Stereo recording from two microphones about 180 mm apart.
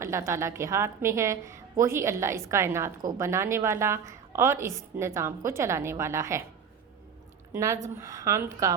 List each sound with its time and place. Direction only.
0.0 s a woman's voice: 15° right (ahead or behind)
7.5 s a woman's voice: 15° right (ahead or behind)